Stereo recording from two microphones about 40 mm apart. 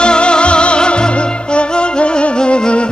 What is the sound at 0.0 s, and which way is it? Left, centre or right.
Music, left.